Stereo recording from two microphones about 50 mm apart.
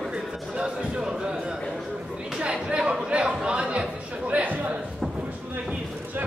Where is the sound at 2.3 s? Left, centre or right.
Centre.